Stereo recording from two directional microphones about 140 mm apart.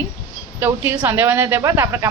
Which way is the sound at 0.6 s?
15° right (ahead or behind).